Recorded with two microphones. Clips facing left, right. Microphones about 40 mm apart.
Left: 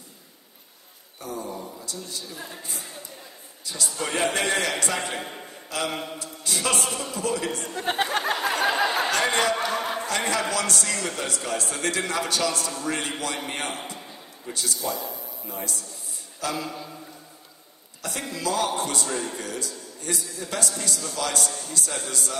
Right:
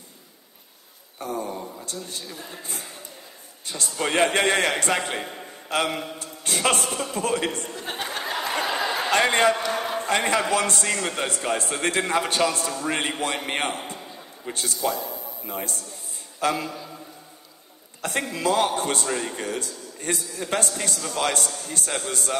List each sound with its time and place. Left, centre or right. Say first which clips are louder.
1.2 s a sound: right 4 dB; right
1.9 s a man's voice: right 1 dB; right
7.6 s speech: left 5 dB; left
9.1 s a sound: right 4 dB; right
9.9 s a man's voice: right 3 dB; right
18.0 s a man's voice: right 5 dB; right